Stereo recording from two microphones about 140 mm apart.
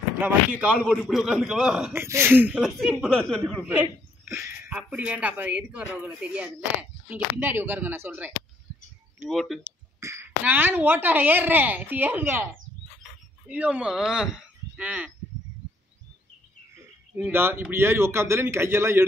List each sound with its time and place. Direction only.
0.2 s a man's voice: 10° right (ahead or behind)
2.0 s speech: 15° right (ahead or behind)
4.3 s a sound: 15° right (ahead or behind)
4.9 s speech: 10° right (ahead or behind)
9.3 s a man's voice: centre (ahead or behind)
9.6 s speech: 20° right (ahead or behind)
13.5 s speech: 10° right (ahead or behind)
17.1 s speech: 15° right (ahead or behind)